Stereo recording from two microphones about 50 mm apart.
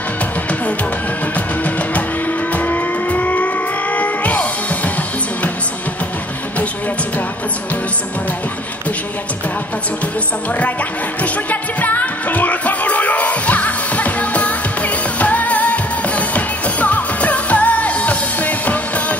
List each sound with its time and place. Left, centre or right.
2.5 s vehicle: left
3.9 s music: left
11.8 s music: left